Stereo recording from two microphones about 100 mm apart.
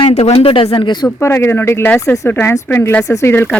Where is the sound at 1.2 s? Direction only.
25° left (ahead or behind).